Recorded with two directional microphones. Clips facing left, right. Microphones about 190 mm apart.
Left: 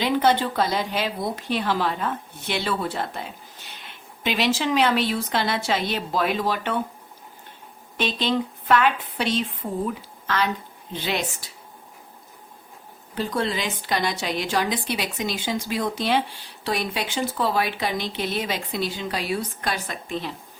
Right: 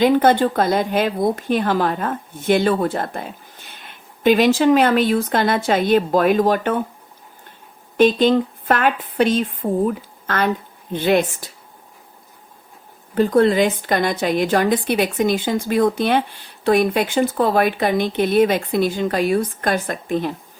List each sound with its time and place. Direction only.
0.0 s a woman's voice: 50° right (ahead or behind)
7.9 s a woman's voice: 50° right (ahead or behind)
13.1 s a woman's voice: 55° right (ahead or behind)